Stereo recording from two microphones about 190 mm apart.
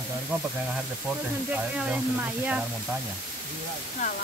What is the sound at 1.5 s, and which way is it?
Speech, 5° right (ahead or behind).